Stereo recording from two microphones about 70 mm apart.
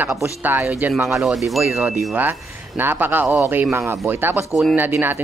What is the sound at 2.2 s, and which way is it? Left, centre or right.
Speech, right.